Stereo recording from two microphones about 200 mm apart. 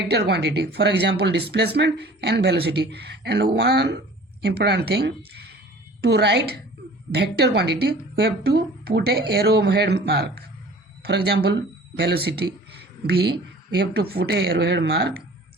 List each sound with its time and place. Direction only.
0.1 s a woman's voice: 55° right (ahead or behind)